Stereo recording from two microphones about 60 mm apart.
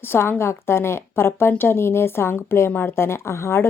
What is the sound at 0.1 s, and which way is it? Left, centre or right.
A woman's voice, left.